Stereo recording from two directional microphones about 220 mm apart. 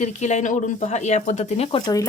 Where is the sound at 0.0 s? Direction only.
30° left (ahead or behind).